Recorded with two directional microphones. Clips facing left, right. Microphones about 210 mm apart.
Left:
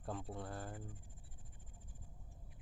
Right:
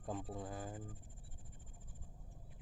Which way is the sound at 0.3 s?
Centre (ahead or behind).